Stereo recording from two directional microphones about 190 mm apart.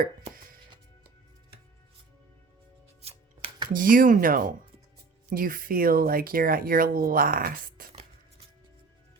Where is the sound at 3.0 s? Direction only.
35° right (ahead or behind).